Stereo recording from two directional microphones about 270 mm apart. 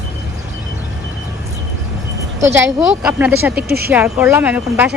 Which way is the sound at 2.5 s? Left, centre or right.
Centre.